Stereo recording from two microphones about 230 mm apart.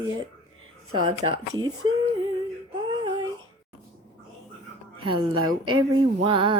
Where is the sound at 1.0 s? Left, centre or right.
Right.